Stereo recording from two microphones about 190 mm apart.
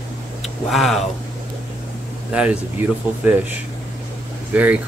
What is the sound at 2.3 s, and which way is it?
Speech, 5° right (ahead or behind).